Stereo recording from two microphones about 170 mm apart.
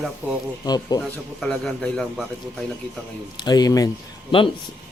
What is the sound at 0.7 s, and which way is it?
Speech, 20° left (ahead or behind).